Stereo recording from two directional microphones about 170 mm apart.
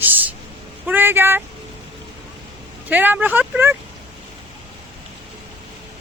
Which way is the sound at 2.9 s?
10° right (ahead or behind).